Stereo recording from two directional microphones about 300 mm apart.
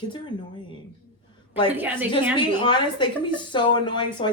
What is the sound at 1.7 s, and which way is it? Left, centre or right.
Speech, centre.